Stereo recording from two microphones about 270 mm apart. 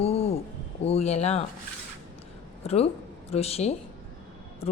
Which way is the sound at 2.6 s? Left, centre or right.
Left.